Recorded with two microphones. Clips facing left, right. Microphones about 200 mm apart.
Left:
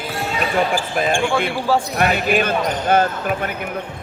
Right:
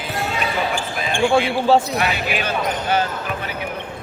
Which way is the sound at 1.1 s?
50° left (ahead or behind).